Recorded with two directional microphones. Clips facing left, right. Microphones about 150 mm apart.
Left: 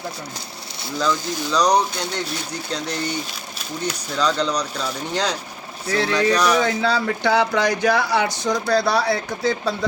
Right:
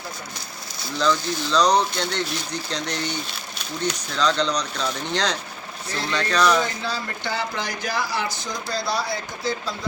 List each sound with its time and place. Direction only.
0.9 s speech: 10° left (ahead or behind)
6.7 s speech: 70° left (ahead or behind)